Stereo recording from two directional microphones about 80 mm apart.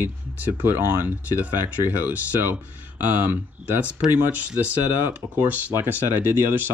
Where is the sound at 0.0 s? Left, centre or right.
Right.